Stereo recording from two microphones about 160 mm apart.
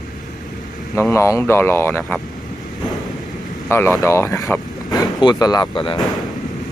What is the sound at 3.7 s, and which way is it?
Speech, 15° left (ahead or behind).